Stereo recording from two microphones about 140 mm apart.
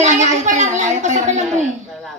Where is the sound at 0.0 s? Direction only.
60° right (ahead or behind).